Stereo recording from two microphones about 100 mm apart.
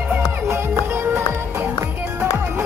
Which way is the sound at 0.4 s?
25° right (ahead or behind).